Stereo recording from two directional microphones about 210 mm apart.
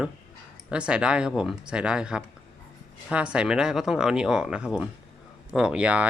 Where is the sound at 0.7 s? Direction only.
5° right (ahead or behind).